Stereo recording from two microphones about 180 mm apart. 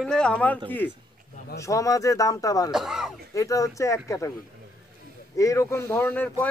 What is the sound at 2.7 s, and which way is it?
Speech, 5° right (ahead or behind).